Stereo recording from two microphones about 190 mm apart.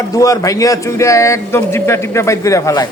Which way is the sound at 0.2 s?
15° left (ahead or behind).